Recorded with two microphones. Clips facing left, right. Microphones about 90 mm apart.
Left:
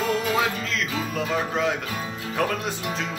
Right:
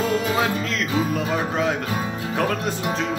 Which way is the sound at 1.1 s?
5° right (ahead or behind).